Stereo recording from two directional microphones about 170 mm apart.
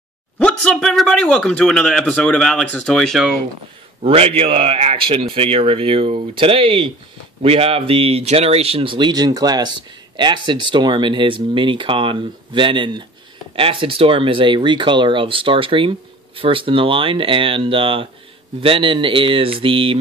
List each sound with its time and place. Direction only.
0.4 s speech: 5° left (ahead or behind)
4.0 s speech: 35° right (ahead or behind)